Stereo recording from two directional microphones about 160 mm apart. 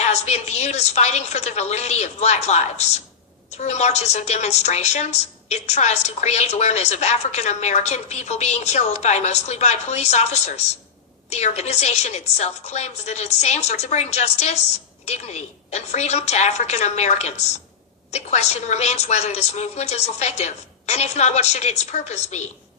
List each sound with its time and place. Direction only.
0.0 s a woman's voice: 45° left (ahead or behind)